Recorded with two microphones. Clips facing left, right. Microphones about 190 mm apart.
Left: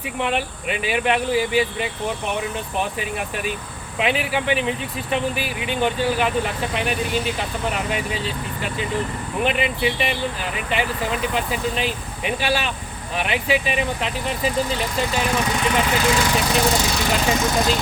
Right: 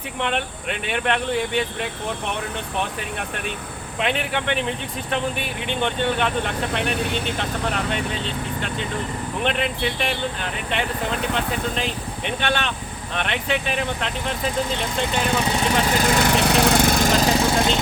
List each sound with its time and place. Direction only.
0.2 s speech: 5° left (ahead or behind)
15.4 s speech: 30° right (ahead or behind)
16.1 s speech: 60° right (ahead or behind); by 17.7 s 25° right (ahead or behind)